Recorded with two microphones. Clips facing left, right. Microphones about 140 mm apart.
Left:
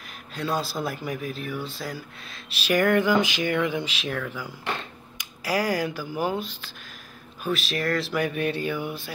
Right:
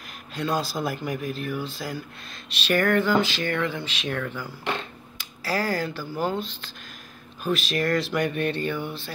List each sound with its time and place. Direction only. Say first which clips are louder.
0.3 s speech: right 1 dB; centre (ahead or behind)
5.1 s speech: left 1 dB; 15° left (ahead or behind)